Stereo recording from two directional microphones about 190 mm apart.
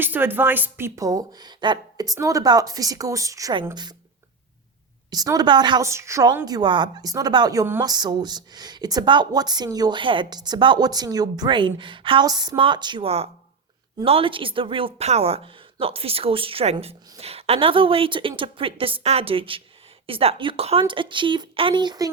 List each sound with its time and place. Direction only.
0.0 s a woman's voice: 10° right (ahead or behind)
5.1 s a woman's voice: 20° right (ahead or behind)